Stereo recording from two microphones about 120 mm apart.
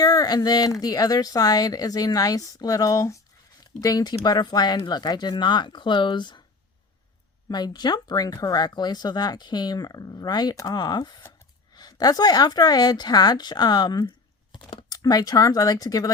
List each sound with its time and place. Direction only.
0.0 s speech: 35° left (ahead or behind)
7.5 s speech: 35° left (ahead or behind)